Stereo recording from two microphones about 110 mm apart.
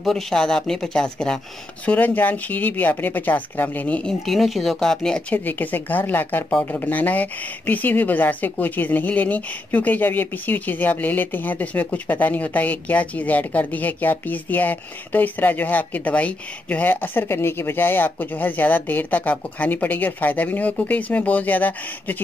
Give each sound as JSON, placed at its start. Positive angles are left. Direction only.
{"t": 0.0, "sound": "speech", "side_deg": 5}